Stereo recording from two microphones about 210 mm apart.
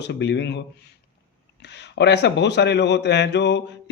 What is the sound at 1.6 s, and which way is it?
A man's voice, 55° left (ahead or behind).